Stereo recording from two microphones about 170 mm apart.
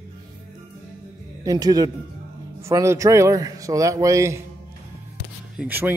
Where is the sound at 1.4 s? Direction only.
20° right (ahead or behind).